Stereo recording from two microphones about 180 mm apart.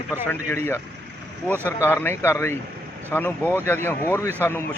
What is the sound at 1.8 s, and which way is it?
A man's voice, 10° left (ahead or behind).